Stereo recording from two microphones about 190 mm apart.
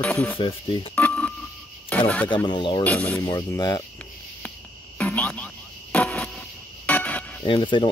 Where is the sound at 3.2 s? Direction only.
20° left (ahead or behind).